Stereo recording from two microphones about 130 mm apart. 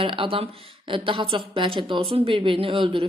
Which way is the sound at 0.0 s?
40° right (ahead or behind).